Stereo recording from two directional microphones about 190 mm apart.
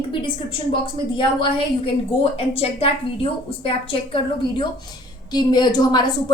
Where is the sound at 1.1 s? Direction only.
25° left (ahead or behind).